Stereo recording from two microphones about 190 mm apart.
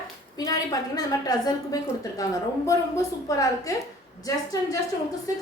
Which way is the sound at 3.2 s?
20° left (ahead or behind).